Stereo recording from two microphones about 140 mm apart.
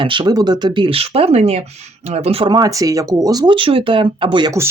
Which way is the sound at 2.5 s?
25° right (ahead or behind).